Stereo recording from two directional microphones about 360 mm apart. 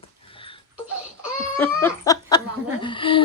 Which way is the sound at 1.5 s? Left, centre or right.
Centre.